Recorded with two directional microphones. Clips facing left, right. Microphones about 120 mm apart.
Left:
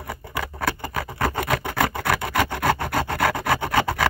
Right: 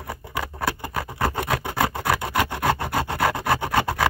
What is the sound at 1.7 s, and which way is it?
Wood, 10° right (ahead or behind).